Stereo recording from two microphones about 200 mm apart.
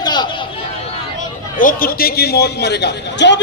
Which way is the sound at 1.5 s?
45° left (ahead or behind).